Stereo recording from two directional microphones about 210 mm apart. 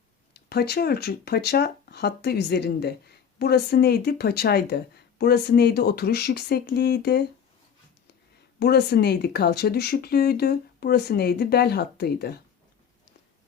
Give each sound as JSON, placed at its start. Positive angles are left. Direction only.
{"t": 0.3, "sound": "speech", "side_deg": 50}
{"t": 8.5, "sound": "speech", "side_deg": 50}